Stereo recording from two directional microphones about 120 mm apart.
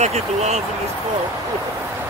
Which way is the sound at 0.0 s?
65° right (ahead or behind).